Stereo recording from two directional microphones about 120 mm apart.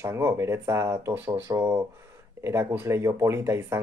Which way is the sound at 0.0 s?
25° right (ahead or behind).